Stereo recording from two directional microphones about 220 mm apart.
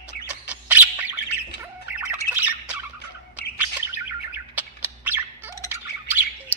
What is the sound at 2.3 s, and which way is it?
Squawk, 5° right (ahead or behind).